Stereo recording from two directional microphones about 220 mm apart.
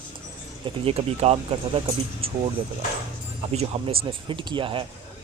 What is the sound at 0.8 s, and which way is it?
Speech, 25° right (ahead or behind).